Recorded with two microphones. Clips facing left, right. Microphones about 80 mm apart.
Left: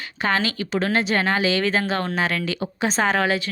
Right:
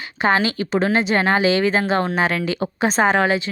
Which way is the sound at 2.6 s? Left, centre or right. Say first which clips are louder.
Right 4 dB; right.